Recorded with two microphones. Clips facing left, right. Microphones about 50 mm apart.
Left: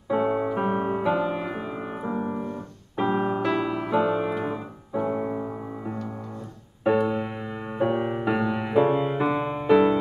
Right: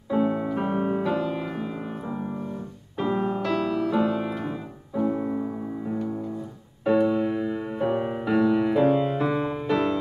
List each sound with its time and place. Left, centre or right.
0.1 s music: centre